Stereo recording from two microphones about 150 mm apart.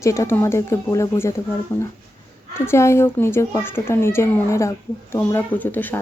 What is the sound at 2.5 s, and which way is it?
A child's voice, 15° left (ahead or behind).